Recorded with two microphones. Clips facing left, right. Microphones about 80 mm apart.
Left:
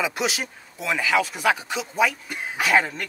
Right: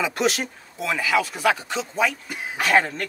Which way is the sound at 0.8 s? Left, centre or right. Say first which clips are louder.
Even; left.